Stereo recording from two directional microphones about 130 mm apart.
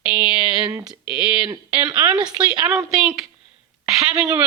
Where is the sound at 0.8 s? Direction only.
5° right (ahead or behind).